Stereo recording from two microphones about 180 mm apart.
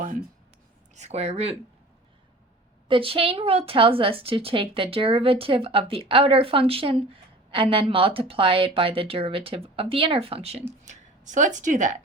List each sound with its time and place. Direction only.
0.9 s a woman's voice: 35° right (ahead or behind)
2.9 s a woman's voice: 30° right (ahead or behind)
10.8 s a woman's voice: 45° right (ahead or behind)